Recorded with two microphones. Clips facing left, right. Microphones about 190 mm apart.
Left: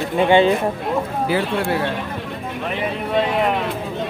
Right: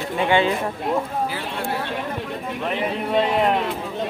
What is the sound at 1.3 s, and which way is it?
Speech, 80° left.